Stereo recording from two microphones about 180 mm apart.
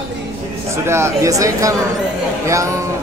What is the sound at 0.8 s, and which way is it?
A man's voice, 15° right (ahead or behind).